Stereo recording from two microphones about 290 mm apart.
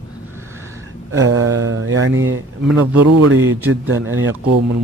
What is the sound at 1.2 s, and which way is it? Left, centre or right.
Mantra, right.